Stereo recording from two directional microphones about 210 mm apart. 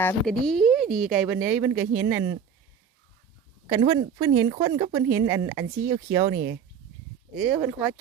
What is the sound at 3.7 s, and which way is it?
Speech, 15° right (ahead or behind).